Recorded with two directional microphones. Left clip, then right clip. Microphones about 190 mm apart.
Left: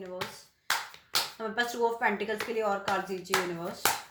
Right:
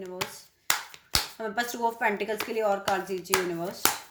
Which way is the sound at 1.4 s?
40° right (ahead or behind).